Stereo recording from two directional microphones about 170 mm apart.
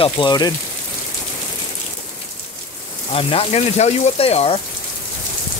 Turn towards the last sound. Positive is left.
turn(degrees=35)  # may be behind; listen again after turning